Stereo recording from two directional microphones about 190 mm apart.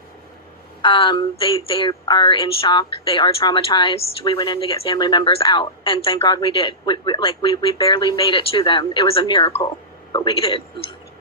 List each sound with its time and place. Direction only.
0.8 s speech: 25° left (ahead or behind)